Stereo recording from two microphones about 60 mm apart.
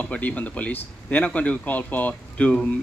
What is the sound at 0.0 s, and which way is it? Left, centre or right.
Speech, left.